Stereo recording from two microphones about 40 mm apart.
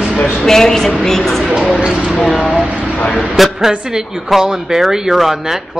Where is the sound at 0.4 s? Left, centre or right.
Centre.